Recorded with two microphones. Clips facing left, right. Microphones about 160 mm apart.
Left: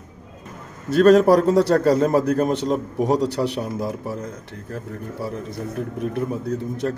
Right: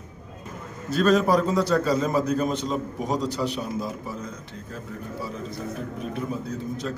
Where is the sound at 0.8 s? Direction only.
65° left (ahead or behind).